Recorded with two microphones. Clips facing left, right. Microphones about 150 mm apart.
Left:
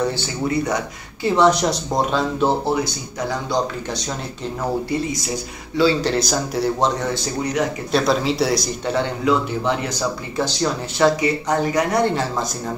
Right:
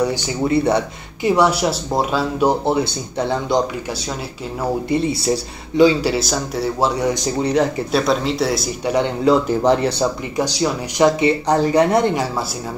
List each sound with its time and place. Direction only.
0.5 s speech: 30° right (ahead or behind)
1.2 s speech: 10° right (ahead or behind)
3.3 s speech: 20° right (ahead or behind)
4.8 s a man's voice: 20° right (ahead or behind); by 6.9 s centre (ahead or behind)
7.4 s speech: 30° right (ahead or behind)
7.9 s a man's voice: centre (ahead or behind)
9.2 s speech: 40° right (ahead or behind)
10.3 s speech: 10° right (ahead or behind); by 12.0 s 30° right (ahead or behind)
12.0 s speech: 15° right (ahead or behind)